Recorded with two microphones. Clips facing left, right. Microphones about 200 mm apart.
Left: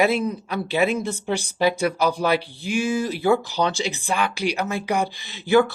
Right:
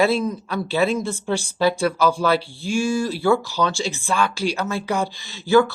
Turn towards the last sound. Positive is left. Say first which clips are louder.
# right 2 dB
turn(degrees=15)  # may be behind; listen again after turning